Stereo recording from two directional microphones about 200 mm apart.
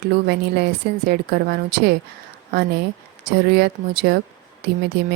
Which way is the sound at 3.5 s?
55° right (ahead or behind).